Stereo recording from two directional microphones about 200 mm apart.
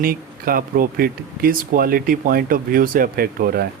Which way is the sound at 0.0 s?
45° right (ahead or behind).